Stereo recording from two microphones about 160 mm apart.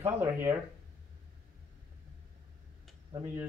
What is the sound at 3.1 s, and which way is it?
Speech, 20° right (ahead or behind).